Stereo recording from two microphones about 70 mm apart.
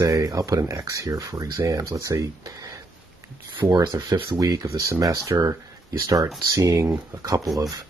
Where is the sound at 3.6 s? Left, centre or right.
Right.